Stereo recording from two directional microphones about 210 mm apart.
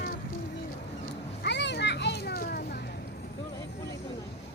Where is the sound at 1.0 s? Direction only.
55° left (ahead or behind).